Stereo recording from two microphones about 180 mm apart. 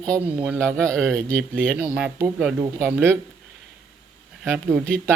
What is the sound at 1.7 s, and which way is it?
Speech, 10° right (ahead or behind).